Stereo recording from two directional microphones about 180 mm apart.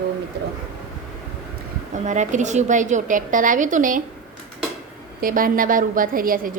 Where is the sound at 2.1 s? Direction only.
40° right (ahead or behind).